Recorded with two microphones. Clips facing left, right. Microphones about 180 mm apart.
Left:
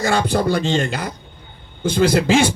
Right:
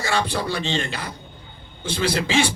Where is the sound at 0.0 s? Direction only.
45° left (ahead or behind).